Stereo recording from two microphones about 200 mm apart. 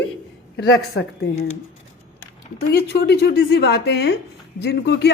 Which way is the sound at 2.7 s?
55° left (ahead or behind).